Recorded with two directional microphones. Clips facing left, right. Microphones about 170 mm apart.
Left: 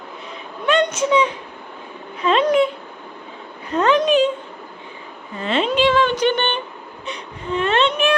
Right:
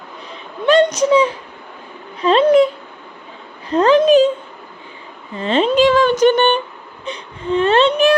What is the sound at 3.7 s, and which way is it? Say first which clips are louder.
Speech: right 5 dB; 30° right (ahead or behind).